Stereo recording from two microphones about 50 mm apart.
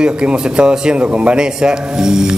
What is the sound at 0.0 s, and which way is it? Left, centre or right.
A man's voice, centre.